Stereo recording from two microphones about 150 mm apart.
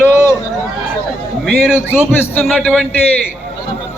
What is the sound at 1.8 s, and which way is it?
A man's voice, 15° left (ahead or behind).